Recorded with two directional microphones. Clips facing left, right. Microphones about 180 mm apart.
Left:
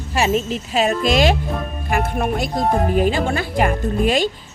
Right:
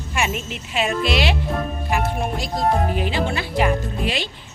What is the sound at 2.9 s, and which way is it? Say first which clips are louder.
Speech: left 5 dB; 45° left (ahead or behind).